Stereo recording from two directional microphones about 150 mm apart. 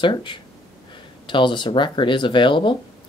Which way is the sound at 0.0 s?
30° left (ahead or behind).